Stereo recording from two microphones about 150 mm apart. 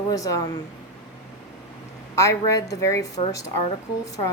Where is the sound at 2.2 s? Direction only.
20° left (ahead or behind).